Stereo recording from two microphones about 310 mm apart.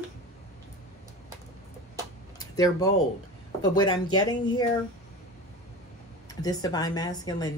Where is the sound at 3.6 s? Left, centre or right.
Centre.